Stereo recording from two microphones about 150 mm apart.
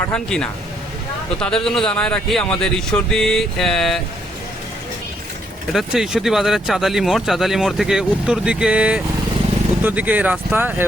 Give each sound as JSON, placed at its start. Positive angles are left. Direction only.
{"t": 0.1, "sound": "speech", "side_deg": 5}
{"t": 5.7, "sound": "speech", "side_deg": -5}